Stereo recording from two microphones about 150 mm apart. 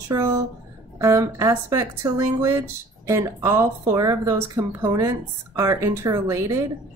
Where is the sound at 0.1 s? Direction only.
25° right (ahead or behind).